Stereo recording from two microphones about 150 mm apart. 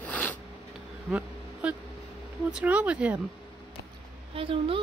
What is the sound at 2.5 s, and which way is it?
Speech, 10° right (ahead or behind).